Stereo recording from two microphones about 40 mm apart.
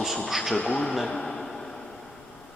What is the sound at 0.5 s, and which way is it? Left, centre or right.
Speech, left.